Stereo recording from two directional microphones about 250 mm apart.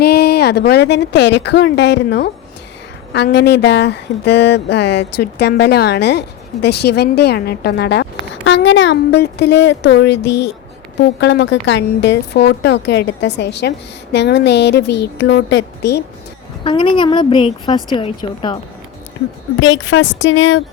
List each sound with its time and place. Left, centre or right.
0.0 s speech: left
16.6 s a woman's voice: centre
19.5 s speech: left